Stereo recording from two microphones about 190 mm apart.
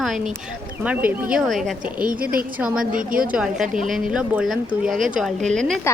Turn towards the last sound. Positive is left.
turn(degrees=5)  # may be behind; listen again after turning